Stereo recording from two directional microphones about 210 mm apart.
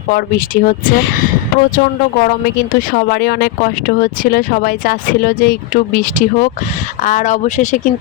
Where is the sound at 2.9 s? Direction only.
50° left (ahead or behind).